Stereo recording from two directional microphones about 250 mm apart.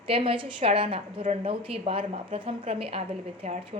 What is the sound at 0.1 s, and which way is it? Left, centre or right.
A woman's voice, right.